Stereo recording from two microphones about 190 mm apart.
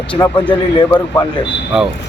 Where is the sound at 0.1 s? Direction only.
25° left (ahead or behind).